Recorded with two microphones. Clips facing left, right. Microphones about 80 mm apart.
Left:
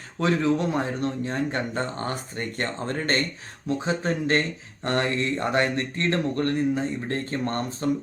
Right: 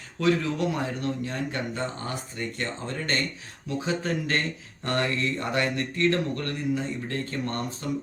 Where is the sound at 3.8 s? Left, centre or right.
Left.